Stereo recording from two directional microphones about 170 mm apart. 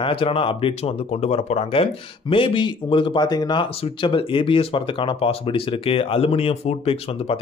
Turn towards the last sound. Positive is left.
turn(degrees=35)  # may be behind; listen again after turning